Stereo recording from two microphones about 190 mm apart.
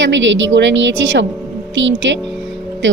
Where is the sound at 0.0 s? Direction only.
75° right (ahead or behind).